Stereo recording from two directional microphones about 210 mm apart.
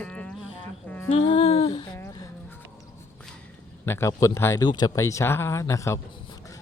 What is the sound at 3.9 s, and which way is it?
Speech, 10° left (ahead or behind).